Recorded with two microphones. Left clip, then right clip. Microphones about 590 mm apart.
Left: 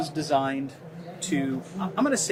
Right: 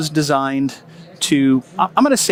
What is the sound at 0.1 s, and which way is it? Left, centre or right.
Speech, right.